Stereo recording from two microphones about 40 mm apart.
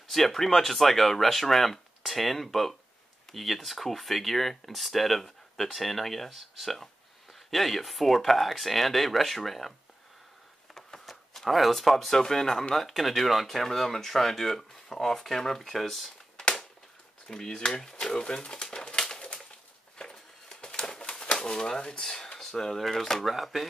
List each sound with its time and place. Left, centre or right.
0.1 s speech: centre
11.1 s speech: centre
17.6 s pigeon: centre
20.0 s typewriter: centre
22.0 s speech: centre